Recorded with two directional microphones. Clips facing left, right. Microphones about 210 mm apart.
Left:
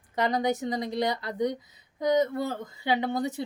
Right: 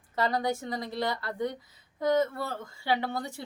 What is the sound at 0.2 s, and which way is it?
A woman's voice, 20° left (ahead or behind).